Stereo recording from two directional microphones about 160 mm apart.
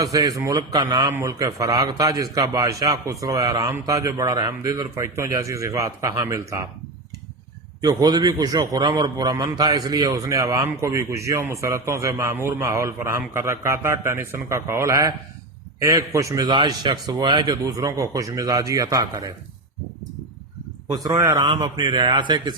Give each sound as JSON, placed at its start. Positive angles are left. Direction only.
{"t": 0.0, "sound": "a man's voice", "side_deg": -20}
{"t": 7.8, "sound": "a man's voice", "side_deg": -25}
{"t": 20.8, "sound": "a man's voice", "side_deg": -20}
{"t": 21.4, "sound": "a man's voice", "side_deg": -30}